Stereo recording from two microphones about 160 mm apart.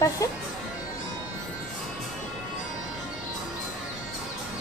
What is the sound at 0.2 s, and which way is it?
Music, 20° left (ahead or behind).